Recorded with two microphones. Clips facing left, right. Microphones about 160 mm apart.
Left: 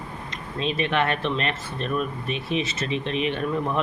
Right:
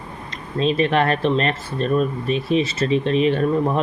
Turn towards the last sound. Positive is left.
turn(degrees=-35)  # may be behind; listen again after turning